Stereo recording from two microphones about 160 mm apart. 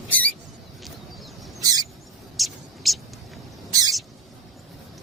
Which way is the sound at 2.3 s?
Centre (ahead or behind).